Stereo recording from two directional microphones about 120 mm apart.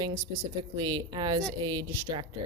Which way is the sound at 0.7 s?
35° right (ahead or behind).